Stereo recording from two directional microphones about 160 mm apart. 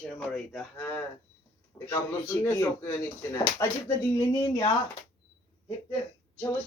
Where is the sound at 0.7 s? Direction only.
15° left (ahead or behind).